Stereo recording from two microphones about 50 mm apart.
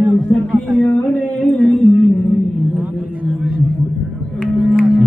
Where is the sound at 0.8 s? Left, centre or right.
Left.